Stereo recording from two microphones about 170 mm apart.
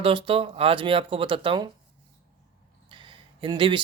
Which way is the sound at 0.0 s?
30° right (ahead or behind).